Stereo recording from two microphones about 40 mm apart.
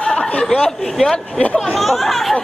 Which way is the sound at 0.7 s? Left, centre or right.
Centre.